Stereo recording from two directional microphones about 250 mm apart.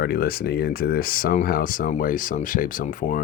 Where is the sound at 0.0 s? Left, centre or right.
Left.